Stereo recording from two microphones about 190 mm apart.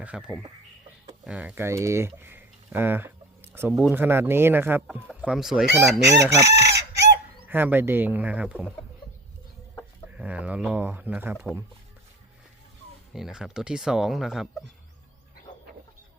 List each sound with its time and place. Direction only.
0.0 s speech: 5° right (ahead or behind)
3.7 s speech: centre (ahead or behind)
6.1 s speech: 15° right (ahead or behind)
6.5 s chicken: 60° right (ahead or behind)
7.4 s speech: 10° right (ahead or behind)
10.2 s speech: 5° right (ahead or behind)
13.1 s speech: 5° right (ahead or behind)